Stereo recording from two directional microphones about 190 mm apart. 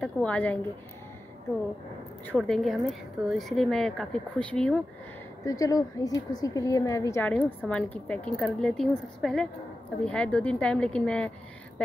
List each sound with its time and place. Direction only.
0.0 s a woman's voice: 5° left (ahead or behind)
2.3 s a woman's voice: centre (ahead or behind)
5.4 s a woman's voice: 20° left (ahead or behind)